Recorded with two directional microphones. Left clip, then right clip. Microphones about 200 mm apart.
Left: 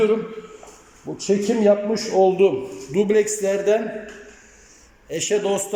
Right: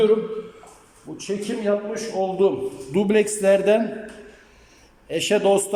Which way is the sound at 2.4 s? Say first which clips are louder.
Left 2 dB; 10° left (ahead or behind).